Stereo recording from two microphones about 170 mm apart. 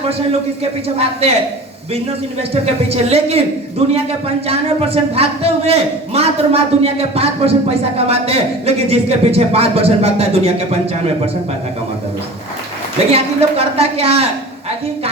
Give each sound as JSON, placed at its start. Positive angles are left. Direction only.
{"t": 0.6, "sound": "a man's voice", "side_deg": -35}
{"t": 2.5, "sound": "a man's voice", "side_deg": -35}
{"t": 4.4, "sound": "a man's voice", "side_deg": -35}
{"t": 13.1, "sound": "a man's voice", "side_deg": -35}